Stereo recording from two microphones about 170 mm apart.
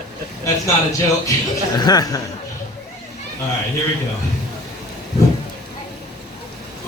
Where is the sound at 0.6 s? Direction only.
20° left (ahead or behind).